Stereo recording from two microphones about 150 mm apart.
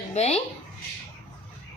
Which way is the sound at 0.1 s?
45° left (ahead or behind).